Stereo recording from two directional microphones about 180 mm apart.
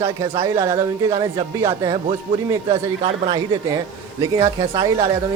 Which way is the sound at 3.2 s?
20° right (ahead or behind).